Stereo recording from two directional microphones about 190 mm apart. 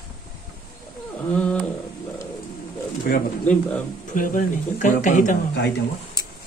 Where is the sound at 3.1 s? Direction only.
55° left (ahead or behind).